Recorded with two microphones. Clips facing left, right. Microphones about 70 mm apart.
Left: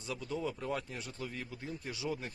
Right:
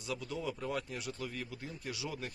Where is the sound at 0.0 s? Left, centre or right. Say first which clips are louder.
Left 1 dB; left.